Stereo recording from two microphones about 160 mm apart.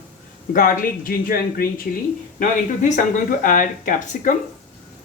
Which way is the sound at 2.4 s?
50° left (ahead or behind).